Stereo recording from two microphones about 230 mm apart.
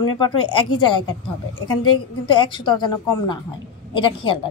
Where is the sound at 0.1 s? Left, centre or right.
Left.